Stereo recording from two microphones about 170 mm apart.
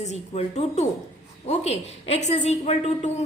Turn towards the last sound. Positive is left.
turn(degrees=40)  # may be behind; listen again after turning